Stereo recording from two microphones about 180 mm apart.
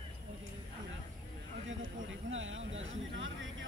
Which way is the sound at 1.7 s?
90° right.